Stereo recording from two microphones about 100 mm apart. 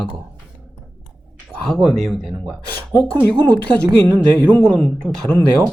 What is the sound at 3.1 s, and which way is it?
Speech, 20° left (ahead or behind).